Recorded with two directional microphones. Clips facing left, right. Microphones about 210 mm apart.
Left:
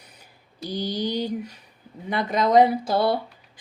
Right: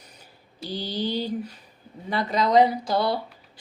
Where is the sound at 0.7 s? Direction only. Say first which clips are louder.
Left 1 dB; 15° left (ahead or behind).